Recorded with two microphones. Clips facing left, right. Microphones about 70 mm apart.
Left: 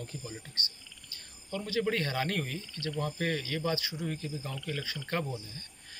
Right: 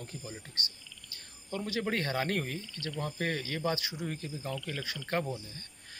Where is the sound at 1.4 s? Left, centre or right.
Right.